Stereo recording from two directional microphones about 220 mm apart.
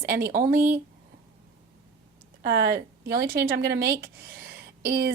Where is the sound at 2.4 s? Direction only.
45° right (ahead or behind).